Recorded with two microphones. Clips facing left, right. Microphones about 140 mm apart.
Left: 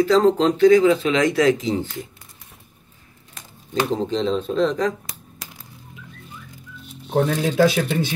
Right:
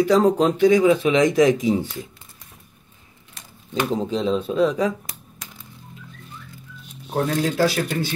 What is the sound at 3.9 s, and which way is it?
Speech, 5° right (ahead or behind).